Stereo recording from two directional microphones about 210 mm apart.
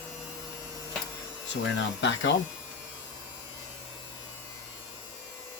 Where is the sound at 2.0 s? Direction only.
55° left (ahead or behind).